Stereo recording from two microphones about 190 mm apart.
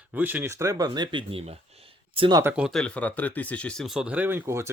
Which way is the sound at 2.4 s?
10° right (ahead or behind).